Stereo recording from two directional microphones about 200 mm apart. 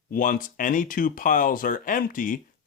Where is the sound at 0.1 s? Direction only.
45° left (ahead or behind).